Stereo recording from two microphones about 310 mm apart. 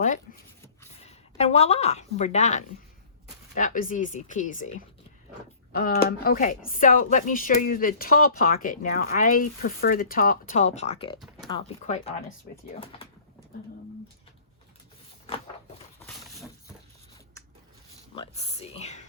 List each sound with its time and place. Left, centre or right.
1.0 s a woman's voice: left
18.1 s speech: centre